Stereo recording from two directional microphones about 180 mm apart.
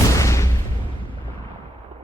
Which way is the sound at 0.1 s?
15° left (ahead or behind).